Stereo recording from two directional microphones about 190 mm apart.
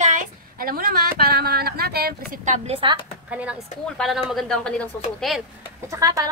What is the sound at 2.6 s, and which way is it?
Speech, 30° right (ahead or behind).